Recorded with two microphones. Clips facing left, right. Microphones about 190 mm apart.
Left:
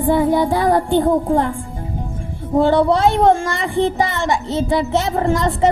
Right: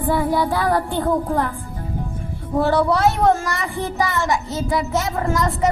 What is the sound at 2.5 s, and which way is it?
Music, 25° left (ahead or behind).